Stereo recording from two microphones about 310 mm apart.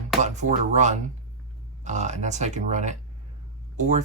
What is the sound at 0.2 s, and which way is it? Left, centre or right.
Speech, right.